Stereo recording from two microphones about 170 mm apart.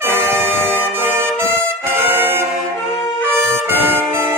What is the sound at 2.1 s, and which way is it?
Brass instrument, 15° right (ahead or behind).